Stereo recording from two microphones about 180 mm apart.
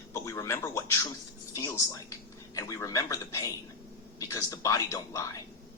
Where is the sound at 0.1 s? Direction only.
15° left (ahead or behind).